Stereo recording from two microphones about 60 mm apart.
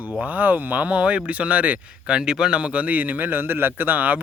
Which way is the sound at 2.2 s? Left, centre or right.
Centre.